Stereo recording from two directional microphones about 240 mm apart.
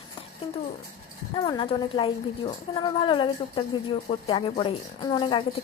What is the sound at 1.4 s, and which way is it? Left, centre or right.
A woman's voice, centre.